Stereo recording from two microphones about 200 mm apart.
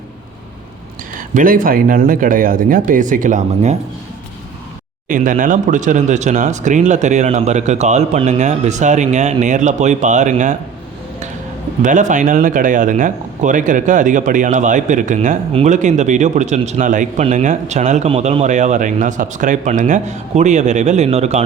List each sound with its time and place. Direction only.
1.3 s speech: 40° right (ahead or behind)
5.0 s speech: 40° right (ahead or behind)
11.8 s speech: 40° right (ahead or behind)